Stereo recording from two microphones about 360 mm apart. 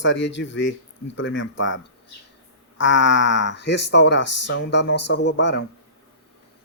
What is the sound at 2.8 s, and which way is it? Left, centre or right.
Speech, left.